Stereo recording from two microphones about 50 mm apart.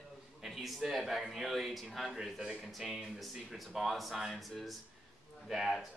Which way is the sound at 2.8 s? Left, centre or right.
Centre.